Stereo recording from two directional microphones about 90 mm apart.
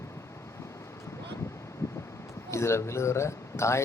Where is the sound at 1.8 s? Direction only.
35° left (ahead or behind).